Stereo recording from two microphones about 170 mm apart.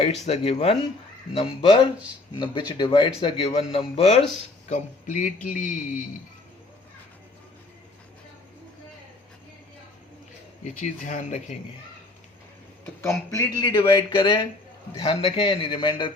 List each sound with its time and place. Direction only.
0.0 s a man's voice: 35° left (ahead or behind)
4.7 s speech: 45° left (ahead or behind)
10.6 s speech: 45° left (ahead or behind)
12.8 s a man's voice: 15° left (ahead or behind)